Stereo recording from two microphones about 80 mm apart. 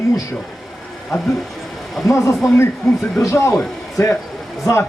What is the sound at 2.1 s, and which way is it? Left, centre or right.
A man's voice, left.